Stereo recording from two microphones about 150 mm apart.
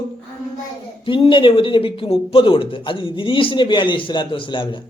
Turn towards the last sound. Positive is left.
turn(degrees=30)  # may be behind; listen again after turning